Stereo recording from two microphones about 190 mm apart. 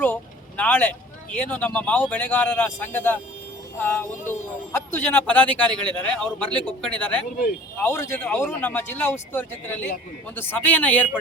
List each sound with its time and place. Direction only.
0.0 s speech: 10° left (ahead or behind)